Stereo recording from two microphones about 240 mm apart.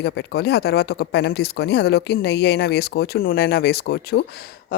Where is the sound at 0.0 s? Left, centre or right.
Left.